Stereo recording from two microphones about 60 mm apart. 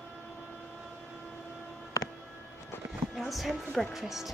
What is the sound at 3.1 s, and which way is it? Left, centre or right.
Speech, centre.